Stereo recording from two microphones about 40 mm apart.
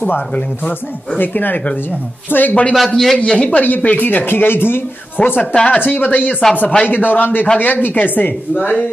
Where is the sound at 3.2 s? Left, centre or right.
Left.